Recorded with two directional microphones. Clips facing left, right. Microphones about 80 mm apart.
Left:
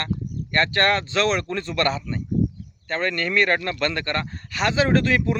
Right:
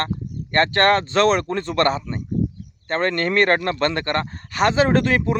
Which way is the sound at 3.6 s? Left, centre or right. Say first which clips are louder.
Right 4 dB; right.